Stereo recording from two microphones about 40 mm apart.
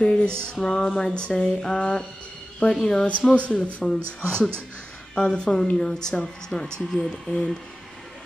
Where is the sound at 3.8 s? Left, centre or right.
Centre.